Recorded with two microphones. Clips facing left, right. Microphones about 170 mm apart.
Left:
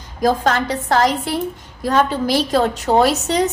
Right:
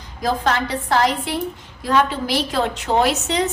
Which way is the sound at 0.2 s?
45° left (ahead or behind).